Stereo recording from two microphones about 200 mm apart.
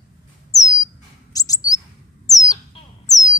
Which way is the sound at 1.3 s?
15° left (ahead or behind).